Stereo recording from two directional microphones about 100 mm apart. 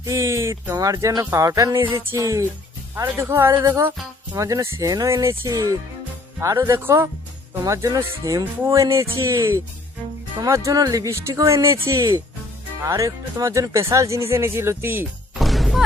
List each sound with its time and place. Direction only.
0.0 s speech: 30° right (ahead or behind)
15.4 s music: centre (ahead or behind)